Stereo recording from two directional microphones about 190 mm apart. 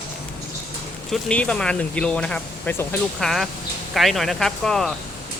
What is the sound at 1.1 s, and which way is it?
Speech, 5° left (ahead or behind).